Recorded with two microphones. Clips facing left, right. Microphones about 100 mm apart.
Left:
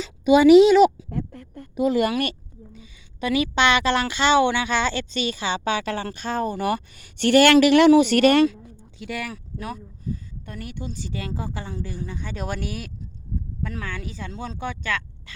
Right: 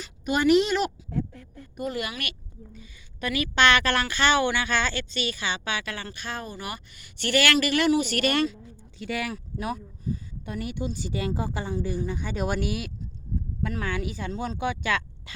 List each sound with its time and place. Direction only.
1.1 s speech: 60° left (ahead or behind)
2.7 s speech: 25° left (ahead or behind); by 8.4 s 50° left (ahead or behind)
9.0 s speech: centre (ahead or behind)
10.4 s speech: 15° right (ahead or behind)